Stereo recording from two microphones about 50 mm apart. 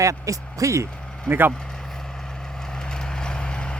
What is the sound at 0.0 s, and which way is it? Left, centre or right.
Speech, right.